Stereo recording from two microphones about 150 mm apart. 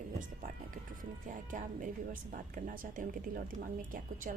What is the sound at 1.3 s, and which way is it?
A woman's voice, 60° right (ahead or behind).